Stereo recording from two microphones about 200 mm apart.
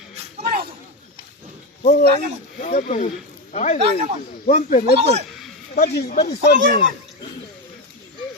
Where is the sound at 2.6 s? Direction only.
35° left (ahead or behind).